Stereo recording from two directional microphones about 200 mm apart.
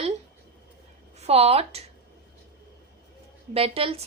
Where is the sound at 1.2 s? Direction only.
30° right (ahead or behind).